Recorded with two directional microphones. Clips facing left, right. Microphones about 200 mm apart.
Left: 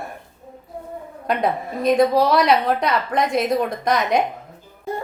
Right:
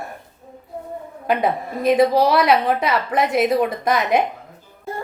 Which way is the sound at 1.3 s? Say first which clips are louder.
Right 1 dB; 5° right (ahead or behind).